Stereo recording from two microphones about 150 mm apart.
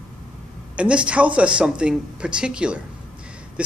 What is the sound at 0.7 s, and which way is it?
Speech, 10° right (ahead or behind).